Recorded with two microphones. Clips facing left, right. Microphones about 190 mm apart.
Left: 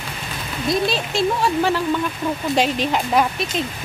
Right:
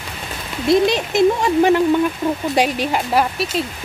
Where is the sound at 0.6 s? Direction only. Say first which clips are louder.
Right 6 dB; 20° right (ahead or behind).